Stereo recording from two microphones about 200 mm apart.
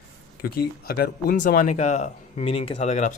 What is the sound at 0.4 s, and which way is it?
Speech, 50° left (ahead or behind).